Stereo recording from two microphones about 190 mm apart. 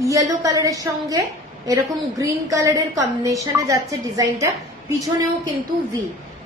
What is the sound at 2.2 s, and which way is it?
A woman's voice, 15° right (ahead or behind).